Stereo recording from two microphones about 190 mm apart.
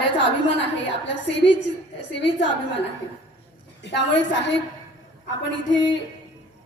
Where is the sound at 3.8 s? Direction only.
70° left (ahead or behind).